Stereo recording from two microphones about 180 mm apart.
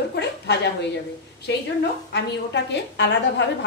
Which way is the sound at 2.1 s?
75° left (ahead or behind).